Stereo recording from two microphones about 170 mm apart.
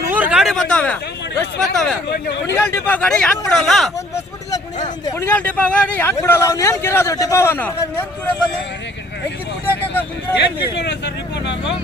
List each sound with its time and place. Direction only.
0.1 s a sound: 10° right (ahead or behind)
1.7 s speech: 5° left (ahead or behind)
2.0 s speech: 70° left (ahead or behind)
2.5 s speech: 15° left (ahead or behind)
5.3 s a man's voice: 10° left (ahead or behind)
9.9 s a man's voice: 10° left (ahead or behind)
10.6 s speech: 80° left